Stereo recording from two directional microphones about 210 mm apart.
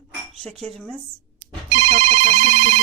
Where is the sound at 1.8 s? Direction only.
30° right (ahead or behind).